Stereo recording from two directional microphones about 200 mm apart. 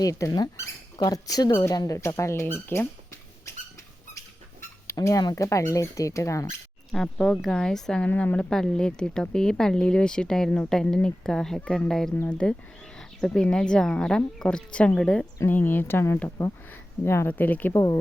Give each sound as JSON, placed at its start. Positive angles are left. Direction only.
{"t": 0.0, "sound": "speech", "side_deg": 15}
{"t": 2.6, "sound": "a sound", "side_deg": 15}
{"t": 4.9, "sound": "speech", "side_deg": 15}
{"t": 6.9, "sound": "speech", "side_deg": 5}